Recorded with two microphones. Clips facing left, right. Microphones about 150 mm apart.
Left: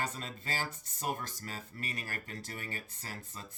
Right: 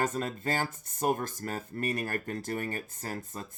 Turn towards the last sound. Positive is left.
turn(degrees=-50)  # may be behind; listen again after turning